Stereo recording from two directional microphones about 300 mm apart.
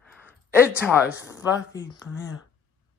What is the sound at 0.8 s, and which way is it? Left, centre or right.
Speech, centre.